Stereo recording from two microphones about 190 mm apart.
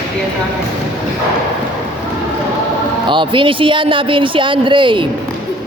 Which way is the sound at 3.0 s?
25° right (ahead or behind).